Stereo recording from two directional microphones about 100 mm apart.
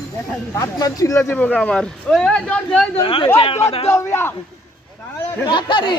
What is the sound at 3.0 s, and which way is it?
Speech, 60° left (ahead or behind).